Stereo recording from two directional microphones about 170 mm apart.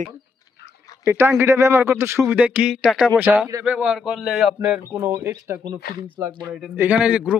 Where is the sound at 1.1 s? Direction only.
15° right (ahead or behind).